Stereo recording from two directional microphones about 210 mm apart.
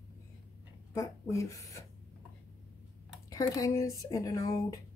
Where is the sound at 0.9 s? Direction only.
15° left (ahead or behind).